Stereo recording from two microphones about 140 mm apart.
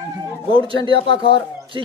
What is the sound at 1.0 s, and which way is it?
Speech, 35° left (ahead or behind).